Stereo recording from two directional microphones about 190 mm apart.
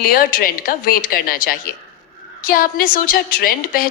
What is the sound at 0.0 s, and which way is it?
A woman's voice, 50° left (ahead or behind).